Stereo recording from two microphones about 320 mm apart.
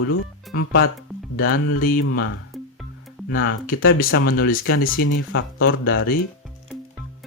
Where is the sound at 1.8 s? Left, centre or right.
Left.